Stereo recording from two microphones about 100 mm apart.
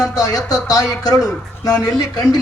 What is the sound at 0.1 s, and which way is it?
Speech, 35° left (ahead or behind).